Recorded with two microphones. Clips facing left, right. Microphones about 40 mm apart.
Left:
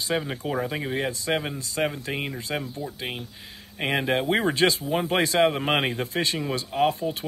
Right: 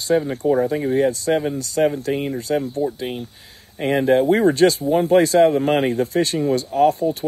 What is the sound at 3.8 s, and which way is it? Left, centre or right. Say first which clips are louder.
Speech: right 8 dB; left.